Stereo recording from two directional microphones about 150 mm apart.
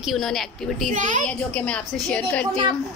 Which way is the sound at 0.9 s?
55° right (ahead or behind).